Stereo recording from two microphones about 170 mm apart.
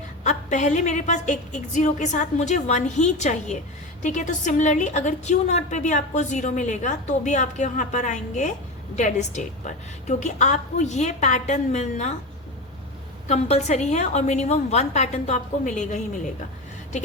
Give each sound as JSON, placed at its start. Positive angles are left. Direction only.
{"t": 0.3, "sound": "a woman's voice", "side_deg": 45}
{"t": 13.2, "sound": "a woman's voice", "side_deg": 40}